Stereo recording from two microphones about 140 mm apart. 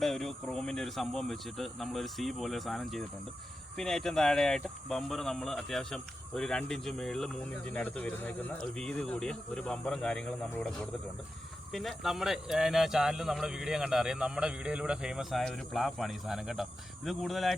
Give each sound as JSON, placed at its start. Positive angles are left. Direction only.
{"t": 0.0, "sound": "speech", "side_deg": 0}